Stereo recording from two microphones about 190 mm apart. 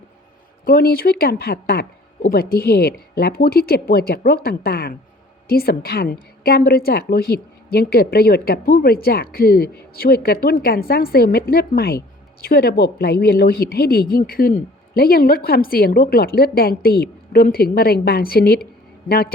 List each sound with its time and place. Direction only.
0.6 s speech: 55° left (ahead or behind)